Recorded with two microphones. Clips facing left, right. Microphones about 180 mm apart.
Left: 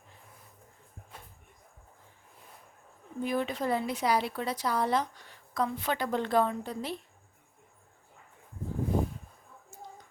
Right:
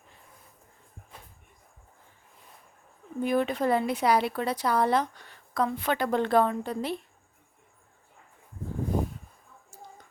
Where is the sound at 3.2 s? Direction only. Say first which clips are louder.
Right 5 dB; 60° right (ahead or behind).